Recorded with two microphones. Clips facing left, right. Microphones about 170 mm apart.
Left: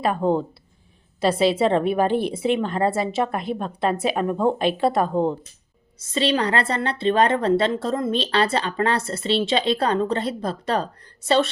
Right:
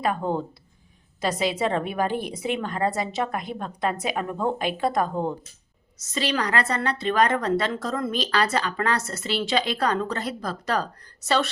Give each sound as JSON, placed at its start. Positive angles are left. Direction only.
{"t": 0.0, "sound": "a woman's voice", "side_deg": 20}